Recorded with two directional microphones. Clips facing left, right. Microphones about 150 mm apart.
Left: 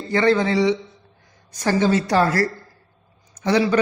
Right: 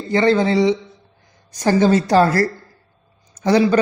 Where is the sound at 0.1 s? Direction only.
30° right (ahead or behind).